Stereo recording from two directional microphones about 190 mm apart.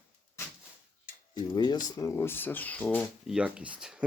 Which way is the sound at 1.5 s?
20° left (ahead or behind).